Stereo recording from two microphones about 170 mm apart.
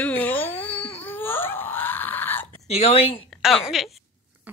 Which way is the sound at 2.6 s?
35° left (ahead or behind).